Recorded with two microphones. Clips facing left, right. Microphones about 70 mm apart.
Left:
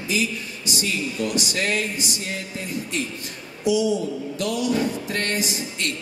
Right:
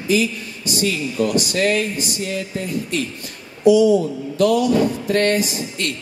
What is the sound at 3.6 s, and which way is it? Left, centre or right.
A woman's voice, right.